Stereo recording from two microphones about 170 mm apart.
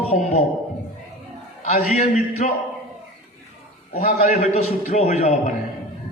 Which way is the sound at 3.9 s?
45° left (ahead or behind).